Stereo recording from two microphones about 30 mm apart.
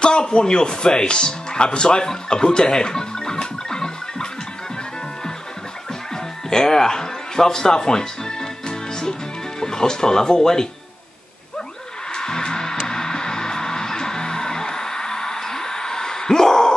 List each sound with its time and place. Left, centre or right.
0.0 s speech: left
6.5 s music: centre
9.6 s speech: left
12.1 s music: left